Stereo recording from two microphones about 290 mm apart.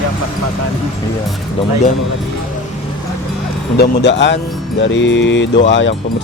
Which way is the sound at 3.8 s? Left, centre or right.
Left.